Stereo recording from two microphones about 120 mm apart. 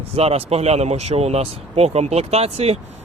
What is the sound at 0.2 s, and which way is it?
Speech, 55° right (ahead or behind).